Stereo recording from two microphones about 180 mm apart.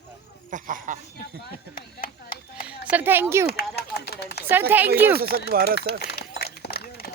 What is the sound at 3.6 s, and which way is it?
Speech, 60° left (ahead or behind).